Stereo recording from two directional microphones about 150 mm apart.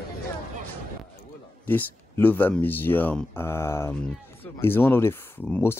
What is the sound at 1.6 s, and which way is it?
Speech, 10° left (ahead or behind).